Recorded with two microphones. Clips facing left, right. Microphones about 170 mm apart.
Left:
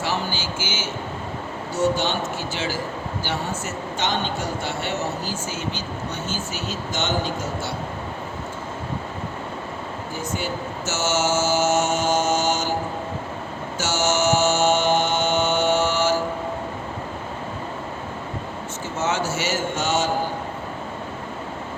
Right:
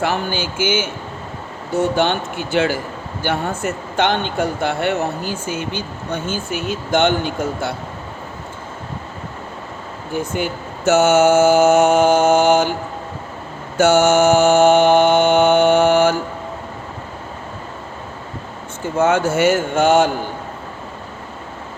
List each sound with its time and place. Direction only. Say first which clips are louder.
0.0 s speech: right 5 dB; 55° right (ahead or behind)
10.2 s speech: right 6 dB; 55° right (ahead or behind)
13.7 s mantra: right 10 dB; 55° right (ahead or behind)
18.9 s speech: right 9 dB; 55° right (ahead or behind)